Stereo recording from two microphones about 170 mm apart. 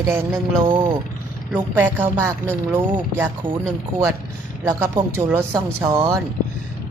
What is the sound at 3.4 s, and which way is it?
Speech, 30° right (ahead or behind).